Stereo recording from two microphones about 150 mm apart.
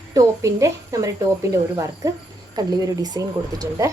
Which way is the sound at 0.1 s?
20° right (ahead or behind).